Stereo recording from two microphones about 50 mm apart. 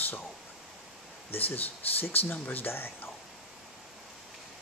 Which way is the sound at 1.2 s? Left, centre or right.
Left.